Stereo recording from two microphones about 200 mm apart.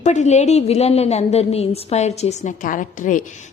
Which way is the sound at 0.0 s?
35° left (ahead or behind).